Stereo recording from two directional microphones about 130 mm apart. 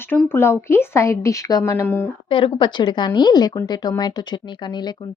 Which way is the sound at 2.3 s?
40° left (ahead or behind).